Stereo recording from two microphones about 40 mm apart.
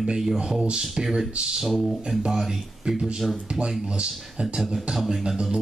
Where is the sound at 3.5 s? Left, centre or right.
Right.